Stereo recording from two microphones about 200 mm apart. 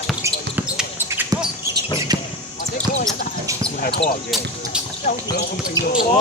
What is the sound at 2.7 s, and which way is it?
Basketball bounce, 35° left (ahead or behind).